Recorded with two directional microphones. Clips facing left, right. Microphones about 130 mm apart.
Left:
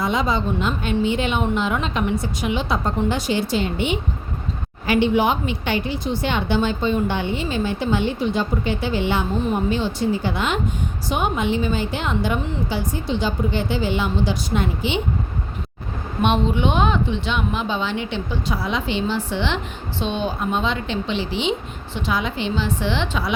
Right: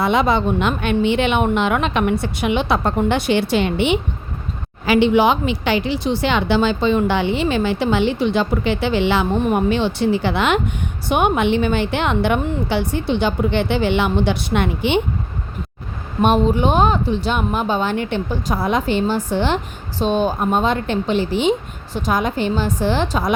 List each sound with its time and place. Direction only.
0.0 s a woman's voice: 65° right (ahead or behind)
4.9 s a woman's voice: 90° right
11.1 s a woman's voice: 65° right (ahead or behind)
16.2 s a woman's voice: 40° right (ahead or behind)